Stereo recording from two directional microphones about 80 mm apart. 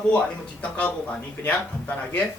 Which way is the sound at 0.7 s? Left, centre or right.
Left.